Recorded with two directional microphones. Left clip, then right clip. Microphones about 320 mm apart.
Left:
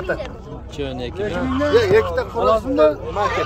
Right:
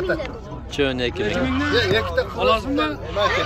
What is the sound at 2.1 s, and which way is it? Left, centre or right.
Speech, centre.